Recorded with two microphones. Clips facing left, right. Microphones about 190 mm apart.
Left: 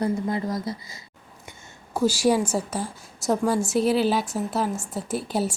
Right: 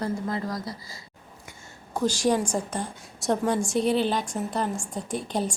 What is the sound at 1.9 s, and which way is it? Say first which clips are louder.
A woman's voice: left 3 dB; 5° left (ahead or behind).